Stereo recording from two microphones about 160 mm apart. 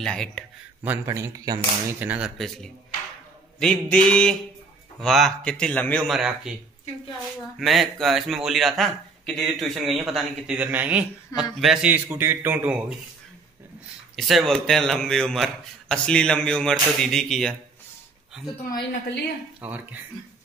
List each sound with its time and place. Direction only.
0.0 s a man's voice: 5° left (ahead or behind)
0.8 s speech: 20° right (ahead or behind)
2.0 s a man's voice: 10° right (ahead or behind)
7.5 s a man's voice: centre (ahead or behind)
14.1 s a man's voice: centre (ahead or behind)
19.6 s a man's voice: 10° right (ahead or behind)